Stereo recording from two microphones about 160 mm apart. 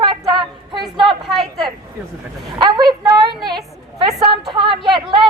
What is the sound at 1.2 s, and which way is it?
Speech, centre (ahead or behind).